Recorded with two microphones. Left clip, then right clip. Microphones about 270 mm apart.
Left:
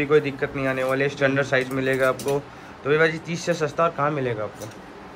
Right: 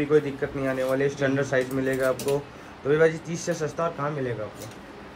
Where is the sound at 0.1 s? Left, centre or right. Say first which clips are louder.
Left 2 dB; centre.